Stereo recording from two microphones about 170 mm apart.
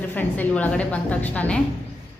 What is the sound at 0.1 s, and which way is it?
A woman's voice, 10° left (ahead or behind).